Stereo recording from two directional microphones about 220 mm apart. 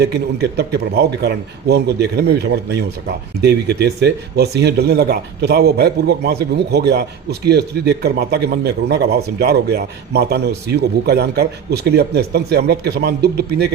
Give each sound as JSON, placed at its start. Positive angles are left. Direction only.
{"t": 0.0, "sound": "speech", "side_deg": -50}